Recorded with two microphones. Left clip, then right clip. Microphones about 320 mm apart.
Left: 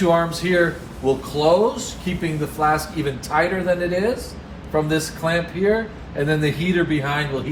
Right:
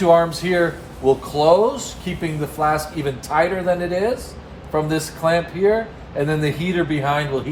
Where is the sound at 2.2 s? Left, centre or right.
Right.